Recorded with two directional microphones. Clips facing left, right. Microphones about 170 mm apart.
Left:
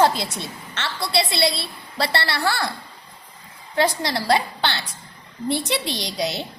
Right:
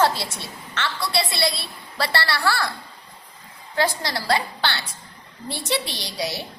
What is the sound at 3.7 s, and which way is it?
A woman's voice, 20° left (ahead or behind).